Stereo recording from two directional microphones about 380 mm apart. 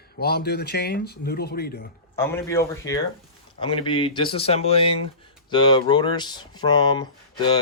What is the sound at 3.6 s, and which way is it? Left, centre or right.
Speech, centre.